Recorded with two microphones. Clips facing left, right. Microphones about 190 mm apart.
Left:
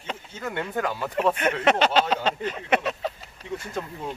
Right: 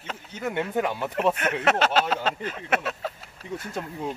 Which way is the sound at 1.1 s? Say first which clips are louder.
Left 2 dB; 5° right (ahead or behind).